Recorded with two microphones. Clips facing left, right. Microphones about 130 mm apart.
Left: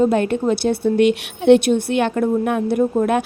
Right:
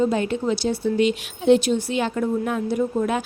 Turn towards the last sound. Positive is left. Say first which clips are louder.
# left 5 dB
turn(degrees=55)  # may be behind; listen again after turning